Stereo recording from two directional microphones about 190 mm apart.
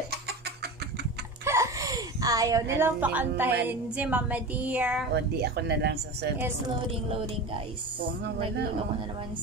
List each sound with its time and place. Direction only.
1.4 s a sound: 15° right (ahead or behind)
5.1 s speech: 60° right (ahead or behind)
7.1 s music: 30° right (ahead or behind)